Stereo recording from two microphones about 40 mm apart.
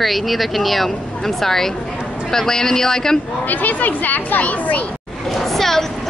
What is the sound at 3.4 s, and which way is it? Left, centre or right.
A child's voice, left.